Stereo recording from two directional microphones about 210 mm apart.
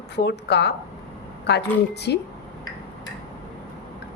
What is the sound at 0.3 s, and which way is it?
A woman's voice, 55° left (ahead or behind).